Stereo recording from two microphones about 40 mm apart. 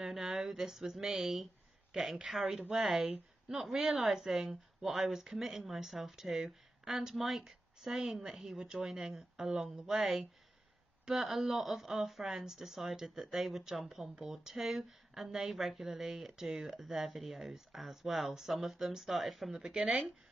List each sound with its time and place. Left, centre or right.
0.0 s a sound: centre
2.2 s speech: centre
8.5 s speech: centre
19.6 s speech: right